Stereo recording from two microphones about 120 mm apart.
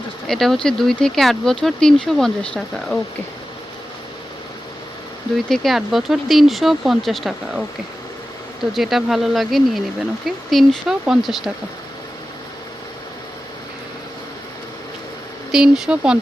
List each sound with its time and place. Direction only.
0.3 s speech: 5° left (ahead or behind)
5.5 s speech: centre (ahead or behind)
8.7 s speech: centre (ahead or behind)
15.5 s speech: 5° right (ahead or behind)